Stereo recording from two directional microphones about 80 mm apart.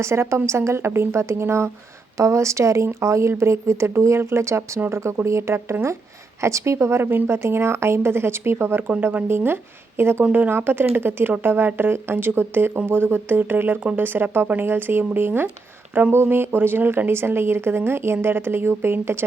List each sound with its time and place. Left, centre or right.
0.0 s a woman's voice: right